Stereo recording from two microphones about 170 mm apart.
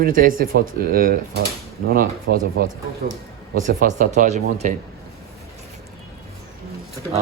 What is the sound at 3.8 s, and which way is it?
Speech, 45° right (ahead or behind).